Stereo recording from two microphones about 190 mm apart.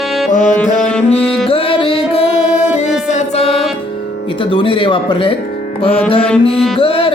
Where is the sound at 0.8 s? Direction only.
5° left (ahead or behind).